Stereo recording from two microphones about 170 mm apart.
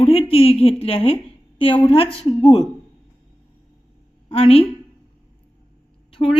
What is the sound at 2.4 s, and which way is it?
Speech, 25° left (ahead or behind).